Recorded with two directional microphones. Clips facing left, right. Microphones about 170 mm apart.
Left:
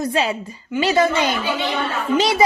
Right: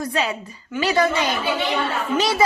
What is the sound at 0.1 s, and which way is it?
A child's voice, 25° left (ahead or behind).